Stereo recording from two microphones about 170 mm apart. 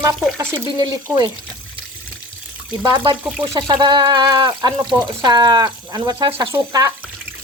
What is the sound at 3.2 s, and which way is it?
Speech, 10° right (ahead or behind).